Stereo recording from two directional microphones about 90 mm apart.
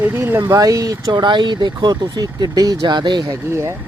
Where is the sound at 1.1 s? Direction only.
60° right (ahead or behind).